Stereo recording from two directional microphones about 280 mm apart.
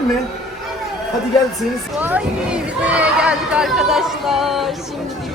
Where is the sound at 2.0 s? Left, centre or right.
Centre.